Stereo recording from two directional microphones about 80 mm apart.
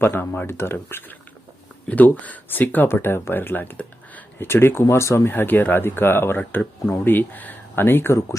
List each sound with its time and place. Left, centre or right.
0.0 s speech: left